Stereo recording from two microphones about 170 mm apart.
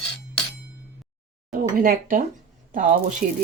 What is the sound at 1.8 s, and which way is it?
Speech, 55° right (ahead or behind).